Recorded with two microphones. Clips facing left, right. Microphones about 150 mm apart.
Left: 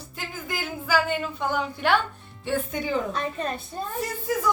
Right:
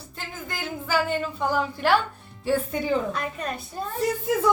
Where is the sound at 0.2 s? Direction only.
5° left (ahead or behind).